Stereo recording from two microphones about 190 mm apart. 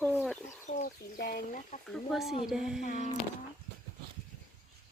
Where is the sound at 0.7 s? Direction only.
45° left (ahead or behind).